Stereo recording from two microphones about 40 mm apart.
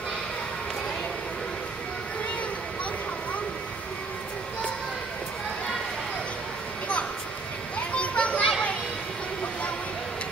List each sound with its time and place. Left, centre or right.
7.9 s children playing: left